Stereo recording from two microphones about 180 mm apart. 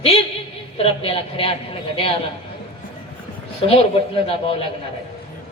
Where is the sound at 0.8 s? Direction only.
30° left (ahead or behind).